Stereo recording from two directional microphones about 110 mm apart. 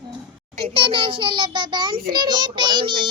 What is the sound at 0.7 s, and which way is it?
Child singing, 50° right (ahead or behind).